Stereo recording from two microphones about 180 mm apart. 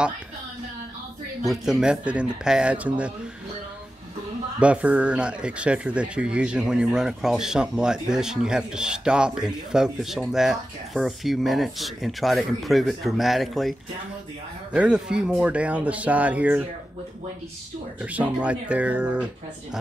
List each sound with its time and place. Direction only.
1.5 s speech: 5° right (ahead or behind)
4.6 s speech: 5° right (ahead or behind)
18.1 s speech: 5° right (ahead or behind)